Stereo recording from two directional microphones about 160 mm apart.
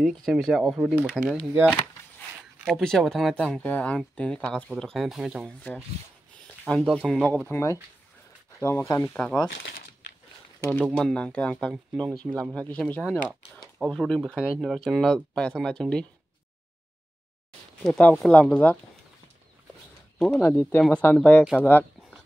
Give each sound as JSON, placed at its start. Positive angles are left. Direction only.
{"t": 0.0, "sound": "speech", "side_deg": 0}
{"t": 2.6, "sound": "speech", "side_deg": 5}
{"t": 6.7, "sound": "speech", "side_deg": 0}
{"t": 9.5, "sound": "crumpling", "side_deg": 60}
{"t": 10.9, "sound": "speech", "side_deg": 5}
{"t": 17.8, "sound": "speech", "side_deg": 5}
{"t": 20.2, "sound": "speech", "side_deg": 5}
{"t": 21.5, "sound": "a sound", "side_deg": 10}